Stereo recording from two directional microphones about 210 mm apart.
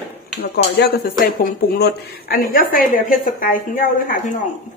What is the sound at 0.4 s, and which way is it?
A woman's voice, 45° left (ahead or behind).